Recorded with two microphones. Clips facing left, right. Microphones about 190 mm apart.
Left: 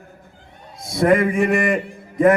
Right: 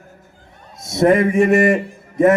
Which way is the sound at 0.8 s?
25° right (ahead or behind).